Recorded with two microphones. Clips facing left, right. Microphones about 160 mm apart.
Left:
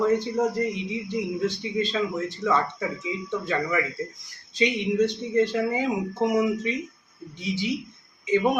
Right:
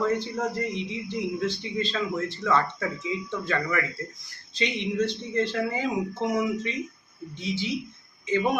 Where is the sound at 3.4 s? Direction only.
15° left (ahead or behind).